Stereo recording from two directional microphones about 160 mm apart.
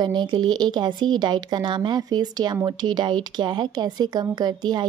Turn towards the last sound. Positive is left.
turn(degrees=-25)  # may be behind; listen again after turning